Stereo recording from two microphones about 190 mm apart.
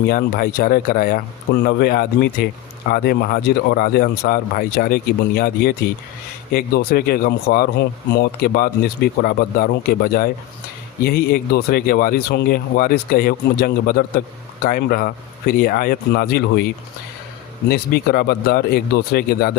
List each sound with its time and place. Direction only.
0.1 s speech: 50° left (ahead or behind)
17.7 s speech: 60° left (ahead or behind)